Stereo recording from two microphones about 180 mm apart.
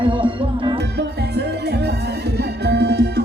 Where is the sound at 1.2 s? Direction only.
70° right (ahead or behind).